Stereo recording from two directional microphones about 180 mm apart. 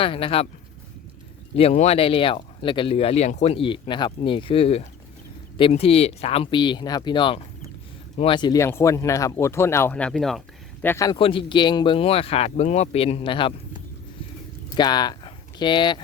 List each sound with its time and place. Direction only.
0.0 s speech: 30° left (ahead or behind)
1.5 s speech: 35° left (ahead or behind); by 10.4 s centre (ahead or behind)
10.8 s speech: 20° left (ahead or behind)
14.8 s speech: 25° left (ahead or behind)